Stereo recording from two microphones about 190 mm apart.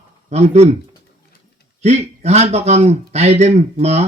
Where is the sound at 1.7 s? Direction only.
35° right (ahead or behind).